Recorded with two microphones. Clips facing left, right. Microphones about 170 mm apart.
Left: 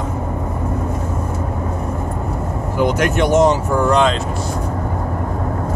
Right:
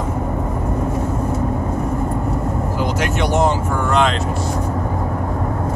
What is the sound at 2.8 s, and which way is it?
Speech, 50° left (ahead or behind).